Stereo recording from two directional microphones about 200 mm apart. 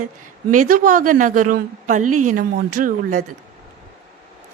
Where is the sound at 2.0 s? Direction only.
90° right.